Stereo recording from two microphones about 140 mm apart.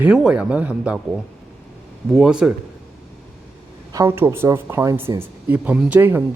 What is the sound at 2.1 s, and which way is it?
Speech, 5° right (ahead or behind).